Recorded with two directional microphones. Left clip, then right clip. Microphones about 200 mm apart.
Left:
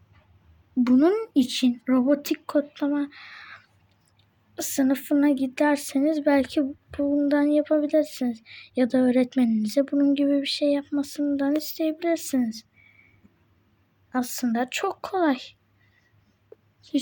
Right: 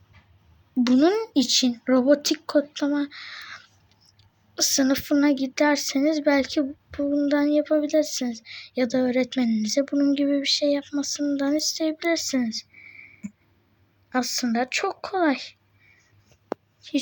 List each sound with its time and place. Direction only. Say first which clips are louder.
0.9 s speech: right 1 dB; 10° left (ahead or behind)
14.3 s speech: right 2 dB; 5° left (ahead or behind)